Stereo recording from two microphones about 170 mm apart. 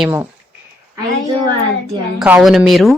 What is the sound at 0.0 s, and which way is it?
Speech, 10° right (ahead or behind).